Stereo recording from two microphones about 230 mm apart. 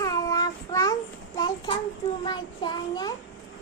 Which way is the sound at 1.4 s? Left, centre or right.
Centre.